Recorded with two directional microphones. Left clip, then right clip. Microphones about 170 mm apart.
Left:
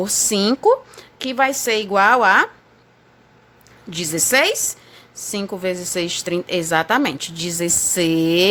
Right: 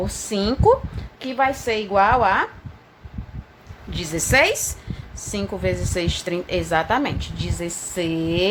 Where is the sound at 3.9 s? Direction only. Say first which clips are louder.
Left 2 dB; 40° left (ahead or behind).